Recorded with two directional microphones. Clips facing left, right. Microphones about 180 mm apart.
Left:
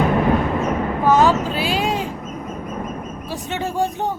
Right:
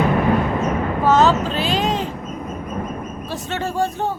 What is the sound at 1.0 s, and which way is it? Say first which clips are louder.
Vehicle: even; 10° left (ahead or behind).